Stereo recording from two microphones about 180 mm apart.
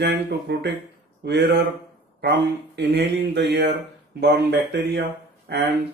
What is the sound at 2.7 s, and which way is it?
Speech, 70° right (ahead or behind).